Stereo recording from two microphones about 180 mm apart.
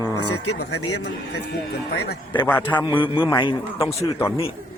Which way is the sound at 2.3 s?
10° left (ahead or behind).